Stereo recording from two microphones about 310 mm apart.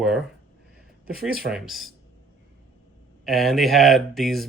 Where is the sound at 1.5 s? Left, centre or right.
Centre.